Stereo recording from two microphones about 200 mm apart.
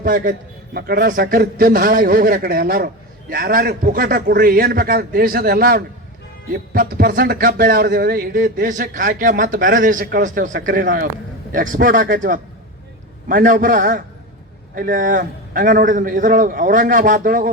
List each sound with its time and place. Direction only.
0.0 s a man's voice: 45° right (ahead or behind)